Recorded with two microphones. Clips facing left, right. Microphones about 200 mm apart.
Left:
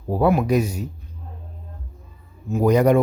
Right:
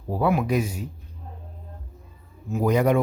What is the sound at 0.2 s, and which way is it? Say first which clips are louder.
Speech: left 4 dB; 40° left (ahead or behind).